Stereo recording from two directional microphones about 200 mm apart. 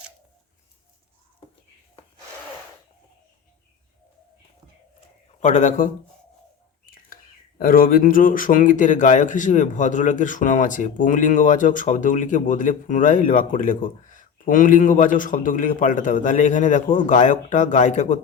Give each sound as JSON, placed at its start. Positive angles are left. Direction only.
{"t": 5.4, "sound": "speech", "side_deg": 40}
{"t": 7.6, "sound": "speech", "side_deg": 45}